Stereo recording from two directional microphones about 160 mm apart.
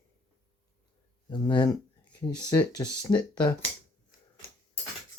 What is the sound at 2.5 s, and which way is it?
Speech, 20° left (ahead or behind).